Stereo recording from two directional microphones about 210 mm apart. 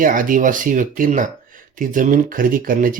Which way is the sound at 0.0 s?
40° right (ahead or behind).